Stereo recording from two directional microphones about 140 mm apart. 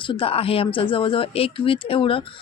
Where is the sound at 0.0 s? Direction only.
40° left (ahead or behind).